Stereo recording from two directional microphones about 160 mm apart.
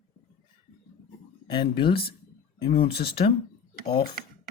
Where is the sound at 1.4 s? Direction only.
35° left (ahead or behind).